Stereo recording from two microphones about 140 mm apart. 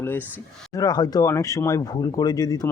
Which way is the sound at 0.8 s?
30° left (ahead or behind).